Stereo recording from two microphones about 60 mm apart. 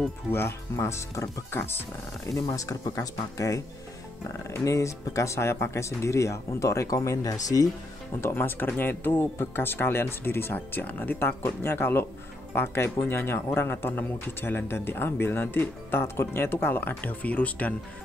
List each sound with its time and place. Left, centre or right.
0.3 s speech: left
0.7 s speech: left
1.5 s speech: left
2.3 s speech: left
8.2 s speech: left